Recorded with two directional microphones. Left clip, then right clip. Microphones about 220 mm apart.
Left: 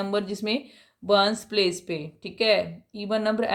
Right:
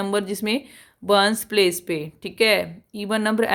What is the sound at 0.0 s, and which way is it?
Speech, 35° right (ahead or behind).